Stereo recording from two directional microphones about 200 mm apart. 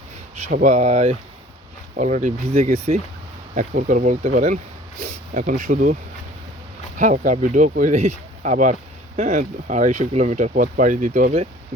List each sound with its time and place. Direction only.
0.5 s speech: 35° right (ahead or behind)